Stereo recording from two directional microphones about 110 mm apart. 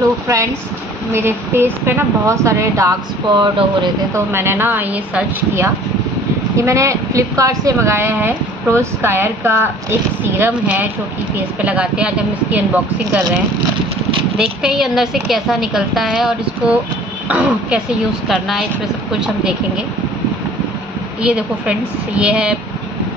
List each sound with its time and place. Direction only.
1.1 s speech: 20° right (ahead or behind)
3.3 s speech: 45° right (ahead or behind)
4.1 s speech: 20° right (ahead or behind)
6.5 s a woman's voice: 25° right (ahead or behind)
14.3 s a woman's voice: 5° right (ahead or behind)
18.3 s a woman's voice: centre (ahead or behind)
21.2 s a woman's voice: 10° right (ahead or behind)